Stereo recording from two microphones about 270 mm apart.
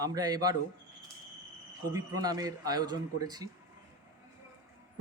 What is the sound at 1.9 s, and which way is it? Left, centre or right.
Speech, centre.